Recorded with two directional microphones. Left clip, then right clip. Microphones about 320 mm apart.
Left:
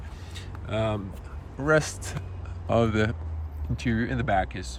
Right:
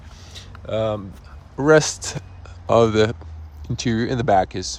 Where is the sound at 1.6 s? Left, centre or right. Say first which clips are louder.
Right 8 dB; centre.